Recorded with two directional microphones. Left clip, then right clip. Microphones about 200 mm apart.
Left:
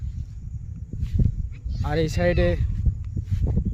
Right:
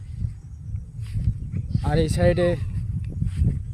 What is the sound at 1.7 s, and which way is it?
Speech, centre (ahead or behind).